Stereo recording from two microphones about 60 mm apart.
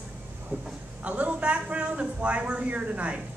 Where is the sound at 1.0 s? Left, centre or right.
Right.